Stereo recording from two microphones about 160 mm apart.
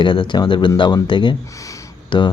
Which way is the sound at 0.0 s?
30° left (ahead or behind).